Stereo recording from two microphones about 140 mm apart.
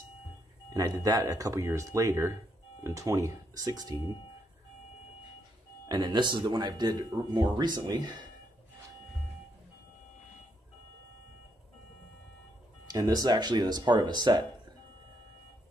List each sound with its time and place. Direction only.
0.7 s speech: 25° right (ahead or behind)
5.9 s speech: 30° right (ahead or behind)
12.9 s speech: 25° right (ahead or behind)